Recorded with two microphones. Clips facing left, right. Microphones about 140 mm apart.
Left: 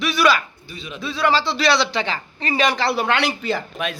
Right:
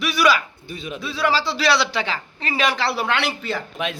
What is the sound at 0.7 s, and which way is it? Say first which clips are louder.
Speech: right 4 dB; 50° right (ahead or behind).